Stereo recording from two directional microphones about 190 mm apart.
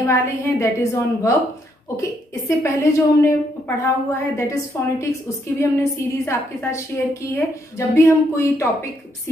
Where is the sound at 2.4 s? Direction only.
15° left (ahead or behind).